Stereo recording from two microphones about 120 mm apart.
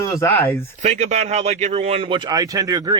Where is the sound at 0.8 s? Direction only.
70° right (ahead or behind); by 3.0 s 30° right (ahead or behind).